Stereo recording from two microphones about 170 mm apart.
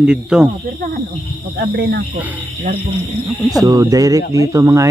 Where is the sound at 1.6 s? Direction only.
70° right (ahead or behind).